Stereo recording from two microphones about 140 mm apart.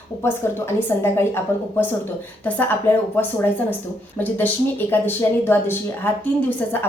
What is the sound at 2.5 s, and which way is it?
Speech, 15° left (ahead or behind).